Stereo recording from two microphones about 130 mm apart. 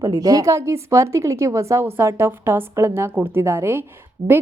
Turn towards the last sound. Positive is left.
turn(degrees=-55)  # may be behind; listen again after turning